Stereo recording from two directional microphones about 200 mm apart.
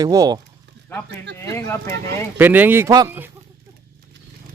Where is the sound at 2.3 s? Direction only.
10° right (ahead or behind).